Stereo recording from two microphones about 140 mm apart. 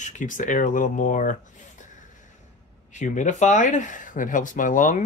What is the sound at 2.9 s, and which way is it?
Speech, 60° left (ahead or behind).